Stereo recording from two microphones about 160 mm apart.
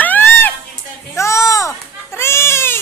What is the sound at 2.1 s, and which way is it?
Goat, 15° left (ahead or behind).